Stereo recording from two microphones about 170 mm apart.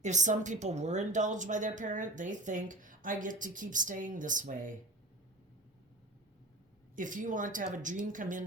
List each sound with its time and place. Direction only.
0.0 s a woman's voice: 45° right (ahead or behind)
6.9 s a woman's voice: 50° right (ahead or behind)